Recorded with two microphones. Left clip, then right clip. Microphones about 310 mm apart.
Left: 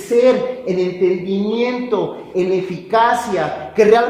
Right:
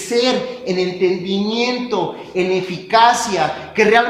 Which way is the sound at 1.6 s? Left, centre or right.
Centre.